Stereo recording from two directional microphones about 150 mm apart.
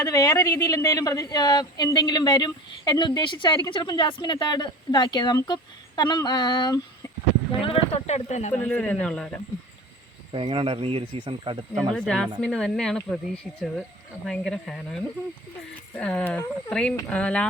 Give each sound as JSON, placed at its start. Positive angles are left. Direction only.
{"t": 0.0, "sound": "speech", "side_deg": 25}
{"t": 7.6, "sound": "speech", "side_deg": 40}
{"t": 8.5, "sound": "speech", "side_deg": 10}
{"t": 10.3, "sound": "speech", "side_deg": -35}
{"t": 11.9, "sound": "speech", "side_deg": 5}